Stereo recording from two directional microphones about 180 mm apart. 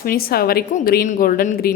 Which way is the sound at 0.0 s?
55° left (ahead or behind).